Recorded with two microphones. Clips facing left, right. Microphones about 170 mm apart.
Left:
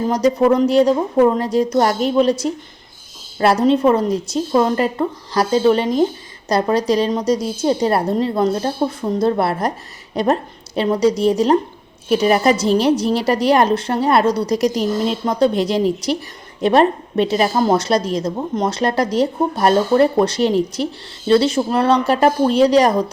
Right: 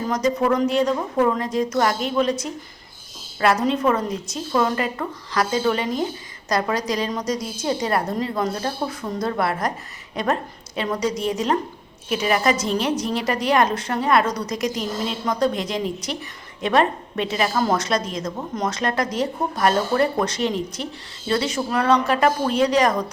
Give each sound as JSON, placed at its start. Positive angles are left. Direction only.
{"t": 0.3, "sound": "a woman's voice", "side_deg": 35}